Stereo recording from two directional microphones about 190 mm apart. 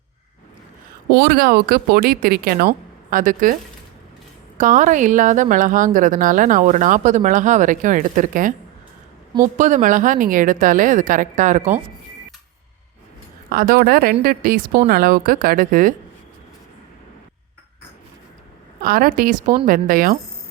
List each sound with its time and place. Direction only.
1.1 s speech: 55° right (ahead or behind)
4.5 s speech: 40° right (ahead or behind)
13.5 s speech: 50° right (ahead or behind)
18.8 s speech: 50° right (ahead or behind)